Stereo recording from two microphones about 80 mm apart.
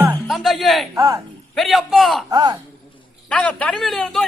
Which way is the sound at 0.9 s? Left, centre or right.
Right.